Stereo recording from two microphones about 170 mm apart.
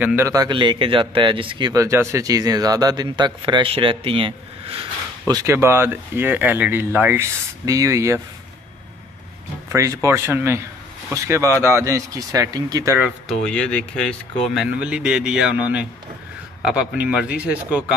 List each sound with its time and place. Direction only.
0.0 s a man's voice: 15° right (ahead or behind); by 4.8 s 30° right (ahead or behind)
5.2 s speech: 20° right (ahead or behind)
9.7 s speech: 15° right (ahead or behind)
13.0 s speech: centre (ahead or behind)